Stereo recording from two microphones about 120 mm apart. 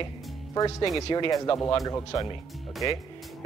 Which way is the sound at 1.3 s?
25° left (ahead or behind).